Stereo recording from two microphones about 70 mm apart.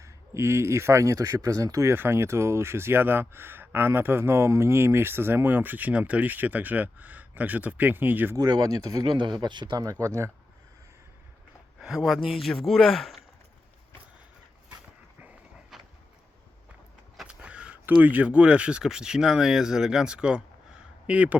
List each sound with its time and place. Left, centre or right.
0.0 s speech: right
2.0 s speech: right
8.4 s speech: right
9.8 s speech: right
11.8 s speech: centre
15.7 s vehicle: centre
17.2 s a sound: centre
17.8 s speech: right